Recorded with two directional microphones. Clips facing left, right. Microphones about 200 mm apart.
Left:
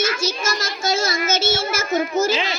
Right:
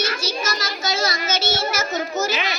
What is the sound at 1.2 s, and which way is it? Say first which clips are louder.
A woman's voice: left 2 dB; 50° left (ahead or behind).